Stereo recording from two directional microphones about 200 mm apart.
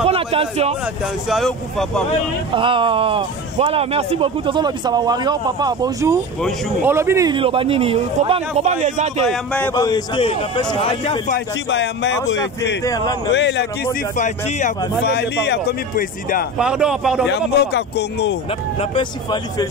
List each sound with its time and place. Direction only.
0.0 s a sound: 30° right (ahead or behind)
1.3 s speech: centre (ahead or behind)
2.5 s a man's voice: 25° right (ahead or behind)
9.3 s speech: 5° left (ahead or behind)
9.8 s a man's voice: 20° left (ahead or behind)
11.2 s a man's voice: 55° left (ahead or behind)
12.8 s a man's voice: 20° left (ahead or behind)
13.3 s a man's voice: 60° left (ahead or behind)
14.1 s a man's voice: 40° left (ahead or behind)
15.0 s speech: 55° left (ahead or behind)
16.5 s speech: 5° right (ahead or behind)
17.3 s a man's voice: 60° left (ahead or behind)
18.8 s a man's voice: 25° left (ahead or behind)